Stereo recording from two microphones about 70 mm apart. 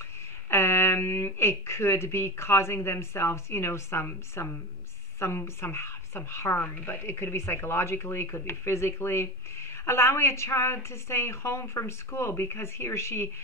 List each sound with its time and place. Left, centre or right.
0.5 s speech: left